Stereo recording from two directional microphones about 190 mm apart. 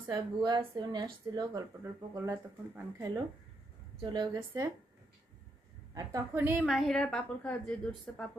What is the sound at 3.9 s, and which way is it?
Speech, 25° right (ahead or behind).